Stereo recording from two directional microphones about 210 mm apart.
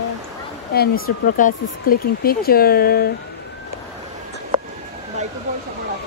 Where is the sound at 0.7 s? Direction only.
45° left (ahead or behind).